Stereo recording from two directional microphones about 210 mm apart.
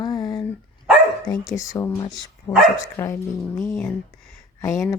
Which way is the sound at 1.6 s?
15° left (ahead or behind).